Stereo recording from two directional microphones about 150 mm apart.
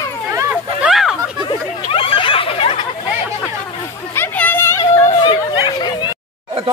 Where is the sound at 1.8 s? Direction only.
40° left (ahead or behind).